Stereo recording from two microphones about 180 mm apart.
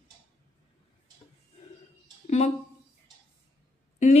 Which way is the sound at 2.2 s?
35° left (ahead or behind).